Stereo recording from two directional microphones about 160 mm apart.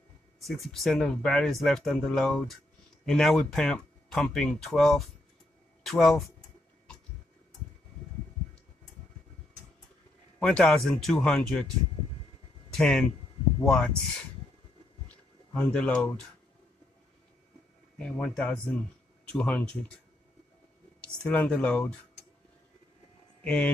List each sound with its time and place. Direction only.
0.4 s speech: centre (ahead or behind)
10.4 s speech: centre (ahead or behind)
12.7 s speech: 5° left (ahead or behind)
15.5 s speech: 10° left (ahead or behind)
17.9 s speech: 5° left (ahead or behind)
21.0 s speech: 10° left (ahead or behind)
23.4 s speech: 10° left (ahead or behind)